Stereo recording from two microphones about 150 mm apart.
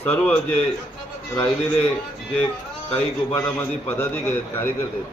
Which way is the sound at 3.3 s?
15° left (ahead or behind).